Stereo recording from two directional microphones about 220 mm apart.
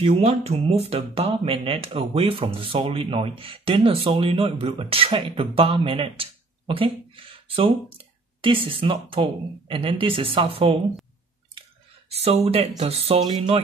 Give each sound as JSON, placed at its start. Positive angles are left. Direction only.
{"t": 0.0, "sound": "speech", "side_deg": -25}
{"t": 12.1, "sound": "speech", "side_deg": -25}